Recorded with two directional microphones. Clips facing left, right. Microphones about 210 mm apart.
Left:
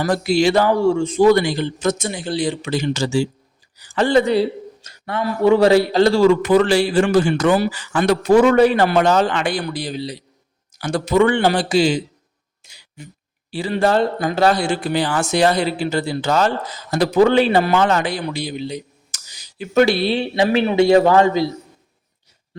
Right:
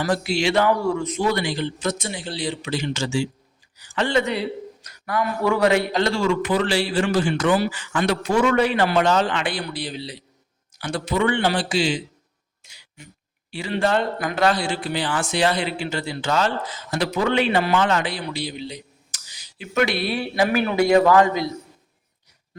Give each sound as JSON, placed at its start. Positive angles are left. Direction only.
{"t": 0.0, "sound": "speech", "side_deg": 40}
{"t": 1.2, "sound": "speech", "side_deg": 45}
{"t": 12.6, "sound": "throat clearing", "side_deg": 35}
{"t": 13.5, "sound": "speech", "side_deg": 35}
{"t": 14.5, "sound": "speech", "side_deg": 45}